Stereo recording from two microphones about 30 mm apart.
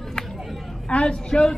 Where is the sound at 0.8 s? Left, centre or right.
Left.